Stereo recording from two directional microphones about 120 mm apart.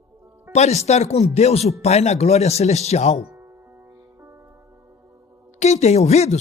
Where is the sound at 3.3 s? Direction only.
20° right (ahead or behind).